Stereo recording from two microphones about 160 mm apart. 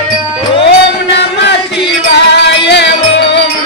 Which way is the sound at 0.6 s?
90° left.